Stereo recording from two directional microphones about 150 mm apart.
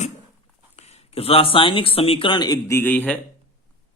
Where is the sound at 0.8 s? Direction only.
45° left (ahead or behind); by 3.2 s 10° left (ahead or behind).